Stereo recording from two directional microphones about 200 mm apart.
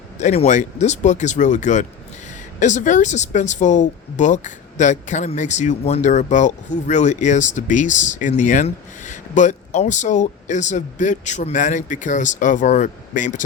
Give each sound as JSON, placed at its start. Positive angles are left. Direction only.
{"t": 0.2, "sound": "speech", "side_deg": 35}